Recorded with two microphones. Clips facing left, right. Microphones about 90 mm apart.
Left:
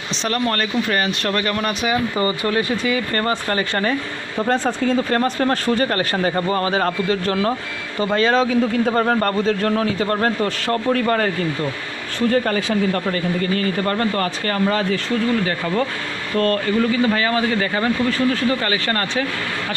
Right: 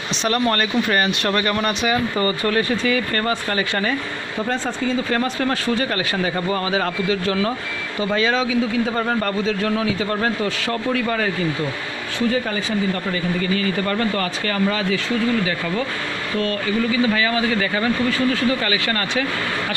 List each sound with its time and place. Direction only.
0.2 s speech: 5° right (ahead or behind)
2.1 s speech: 20° left (ahead or behind); by 3.9 s 35° left (ahead or behind)
4.5 s a man's voice: 50° left (ahead or behind)
12.3 s a man's voice: 70° left (ahead or behind); by 15.0 s 45° left (ahead or behind)
16.3 s speech: 55° left (ahead or behind); by 19.2 s 40° left (ahead or behind)